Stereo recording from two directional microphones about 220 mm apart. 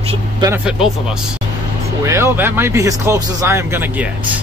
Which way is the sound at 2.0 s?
10° right (ahead or behind).